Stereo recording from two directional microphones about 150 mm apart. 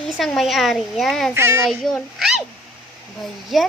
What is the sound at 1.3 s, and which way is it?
Speech, 15° right (ahead or behind).